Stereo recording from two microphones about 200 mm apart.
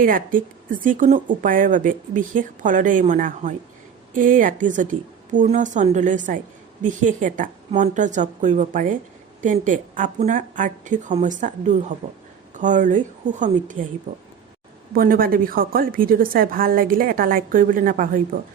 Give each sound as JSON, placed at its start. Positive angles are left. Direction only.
{"t": 0.0, "sound": "speech", "side_deg": -45}
{"t": 14.9, "sound": "a woman's voice", "side_deg": -45}